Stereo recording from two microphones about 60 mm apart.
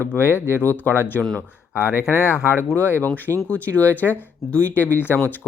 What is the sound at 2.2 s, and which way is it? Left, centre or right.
Speech, left.